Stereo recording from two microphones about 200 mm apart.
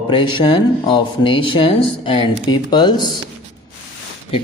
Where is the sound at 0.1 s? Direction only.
25° left (ahead or behind).